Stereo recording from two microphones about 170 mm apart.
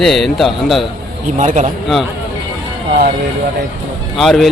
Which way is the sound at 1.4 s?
45° right (ahead or behind).